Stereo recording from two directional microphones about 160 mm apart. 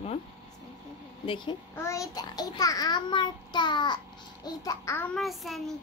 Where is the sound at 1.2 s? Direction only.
30° left (ahead or behind).